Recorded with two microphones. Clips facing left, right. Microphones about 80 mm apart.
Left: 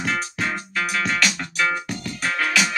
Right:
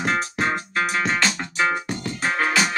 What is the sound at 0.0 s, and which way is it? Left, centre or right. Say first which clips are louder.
Music: right 2 dB; right.